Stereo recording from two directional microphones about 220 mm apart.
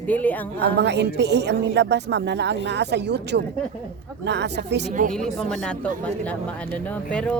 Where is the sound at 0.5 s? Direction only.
50° right (ahead or behind).